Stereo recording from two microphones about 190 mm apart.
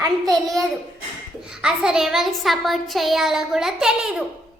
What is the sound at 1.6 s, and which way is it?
Speech, 5° right (ahead or behind).